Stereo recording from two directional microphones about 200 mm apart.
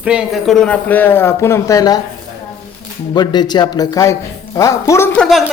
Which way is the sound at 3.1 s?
20° left (ahead or behind).